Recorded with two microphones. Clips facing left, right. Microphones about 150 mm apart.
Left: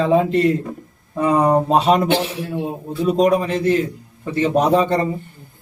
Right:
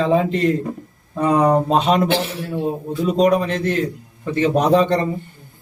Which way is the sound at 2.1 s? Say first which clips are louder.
Left 1 dB; 20° left (ahead or behind).